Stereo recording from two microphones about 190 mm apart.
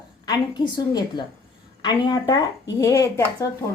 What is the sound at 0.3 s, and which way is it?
A woman's voice, 20° left (ahead or behind).